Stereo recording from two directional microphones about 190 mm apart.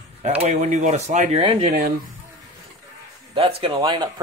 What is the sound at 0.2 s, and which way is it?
Speech, 35° right (ahead or behind).